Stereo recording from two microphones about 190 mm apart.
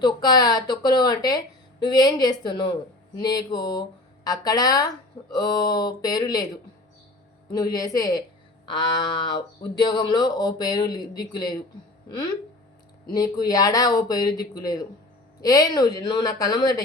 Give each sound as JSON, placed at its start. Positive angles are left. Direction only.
{"t": 0.0, "sound": "speech", "side_deg": 20}
{"t": 13.1, "sound": "speech", "side_deg": 20}